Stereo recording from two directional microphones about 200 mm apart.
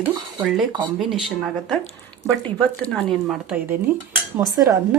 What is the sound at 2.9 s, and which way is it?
Speech, centre (ahead or behind).